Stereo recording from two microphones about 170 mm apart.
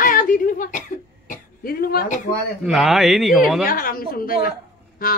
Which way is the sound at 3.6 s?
55° left (ahead or behind).